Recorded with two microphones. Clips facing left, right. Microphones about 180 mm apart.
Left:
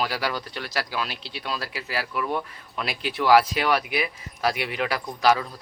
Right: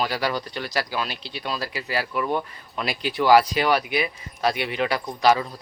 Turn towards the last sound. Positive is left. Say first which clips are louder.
# right 2 dB
turn(degrees=0)  # may be behind; listen again after turning